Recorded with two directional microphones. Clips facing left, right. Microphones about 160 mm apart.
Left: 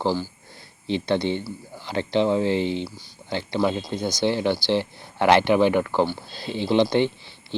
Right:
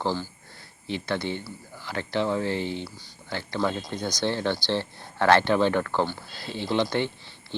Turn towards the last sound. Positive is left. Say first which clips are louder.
# left 6 dB
turn(degrees=15)  # may be behind; listen again after turning